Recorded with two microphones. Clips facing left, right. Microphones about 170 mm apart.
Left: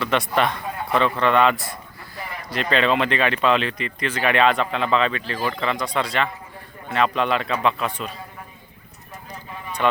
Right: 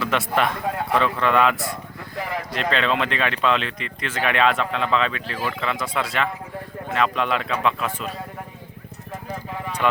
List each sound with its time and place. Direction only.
0.0 s speech: centre (ahead or behind)
2.1 s a sound: 90° right
2.5 s speech: centre (ahead or behind)
9.3 s clip-clop: 90° right